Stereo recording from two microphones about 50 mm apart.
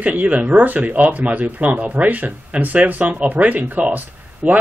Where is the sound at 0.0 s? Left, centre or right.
Right.